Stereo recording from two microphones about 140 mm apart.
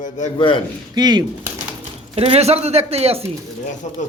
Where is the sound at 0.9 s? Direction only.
30° right (ahead or behind).